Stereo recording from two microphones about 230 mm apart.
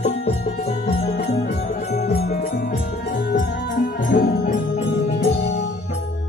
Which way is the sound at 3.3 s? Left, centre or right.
Left.